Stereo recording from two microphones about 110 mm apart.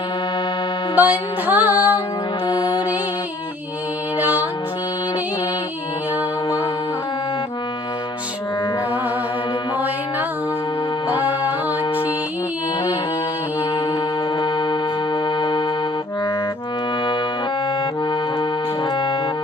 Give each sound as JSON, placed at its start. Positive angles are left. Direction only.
{"t": 1.0, "sound": "music", "side_deg": -15}
{"t": 2.5, "sound": "music", "side_deg": 45}
{"t": 4.2, "sound": "music", "side_deg": -15}
{"t": 14.3, "sound": "music", "side_deg": 45}